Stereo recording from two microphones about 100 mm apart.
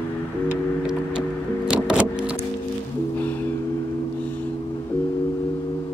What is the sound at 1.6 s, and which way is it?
Music, 10° right (ahead or behind).